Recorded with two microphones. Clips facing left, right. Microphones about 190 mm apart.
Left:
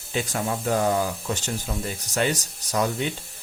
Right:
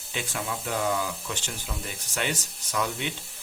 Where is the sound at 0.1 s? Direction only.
40° left (ahead or behind).